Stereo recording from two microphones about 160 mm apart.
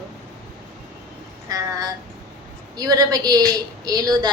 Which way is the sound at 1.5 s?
20° right (ahead or behind).